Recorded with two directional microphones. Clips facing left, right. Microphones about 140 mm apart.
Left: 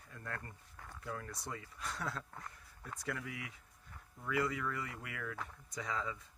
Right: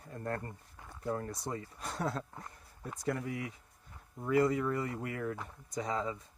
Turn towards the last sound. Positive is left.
turn(degrees=-35)  # may be behind; listen again after turning